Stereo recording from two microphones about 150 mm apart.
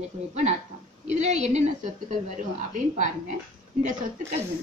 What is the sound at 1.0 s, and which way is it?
A woman's voice, 50° right (ahead or behind).